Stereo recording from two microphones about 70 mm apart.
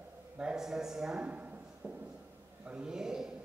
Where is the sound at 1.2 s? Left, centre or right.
Right.